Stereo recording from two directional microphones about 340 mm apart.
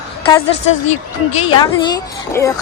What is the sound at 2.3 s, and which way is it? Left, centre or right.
Speech, centre.